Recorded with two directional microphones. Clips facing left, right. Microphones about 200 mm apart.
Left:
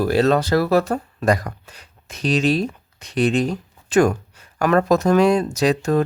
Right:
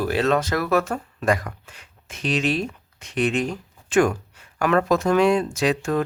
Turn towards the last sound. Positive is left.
turn(degrees=40)  # may be behind; listen again after turning